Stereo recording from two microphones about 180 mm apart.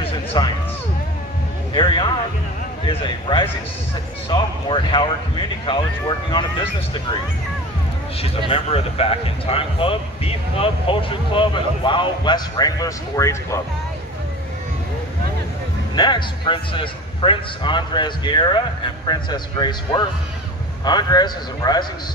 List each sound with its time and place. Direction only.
0.0 s music: 30° left (ahead or behind)
1.7 s speech: 25° left (ahead or behind)
8.2 s speech: 30° left (ahead or behind)
15.9 s speech: 25° left (ahead or behind)